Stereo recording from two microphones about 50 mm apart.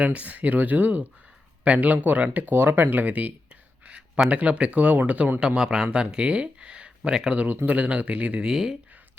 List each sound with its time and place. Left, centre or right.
0.0 s speech: right
1.6 s speech: right
1.9 s speech: right
2.6 s speech: right
5.4 s speech: centre
7.4 s speech: right
8.4 s speech: centre